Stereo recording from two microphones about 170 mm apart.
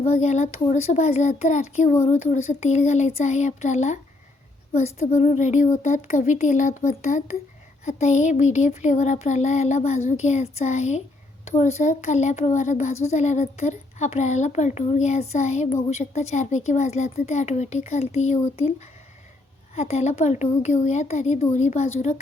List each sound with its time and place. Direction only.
0.1 s speech: 40° left (ahead or behind)
19.7 s speech: 40° left (ahead or behind)